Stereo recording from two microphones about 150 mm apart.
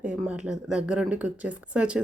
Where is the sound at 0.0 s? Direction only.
10° right (ahead or behind).